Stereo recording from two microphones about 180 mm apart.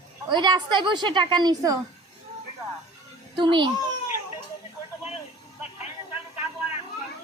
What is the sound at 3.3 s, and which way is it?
Speech, 25° right (ahead or behind).